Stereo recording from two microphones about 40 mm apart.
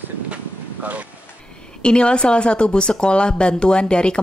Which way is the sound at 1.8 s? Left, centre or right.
Left.